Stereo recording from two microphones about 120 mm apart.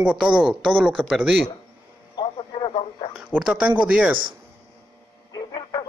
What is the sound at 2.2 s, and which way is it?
Radio, 40° left (ahead or behind).